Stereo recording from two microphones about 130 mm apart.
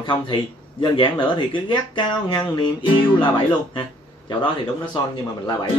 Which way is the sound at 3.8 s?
35° left (ahead or behind).